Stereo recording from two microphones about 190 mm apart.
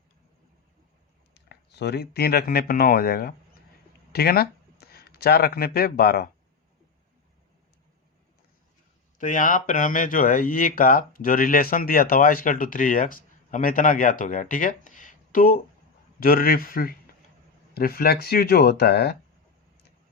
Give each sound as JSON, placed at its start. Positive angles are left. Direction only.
{"t": 1.3, "sound": "speech", "side_deg": 60}
{"t": 9.1, "sound": "speech", "side_deg": 45}